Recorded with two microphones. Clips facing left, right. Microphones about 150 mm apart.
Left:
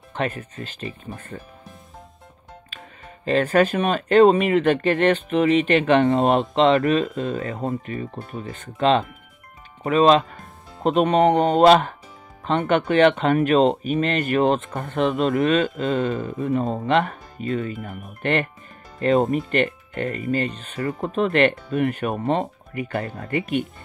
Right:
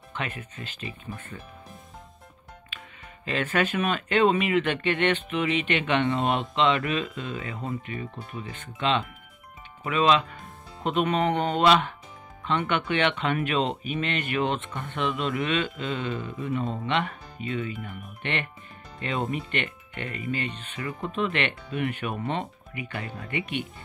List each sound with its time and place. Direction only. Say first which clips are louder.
0.1 s speech: left 8 dB; 40° left (ahead or behind)
2.7 s music: left 2 dB; 40° left (ahead or behind)
3.3 s speech: left 8 dB; 40° left (ahead or behind)
7.9 s speech: left 5 dB; 35° left (ahead or behind)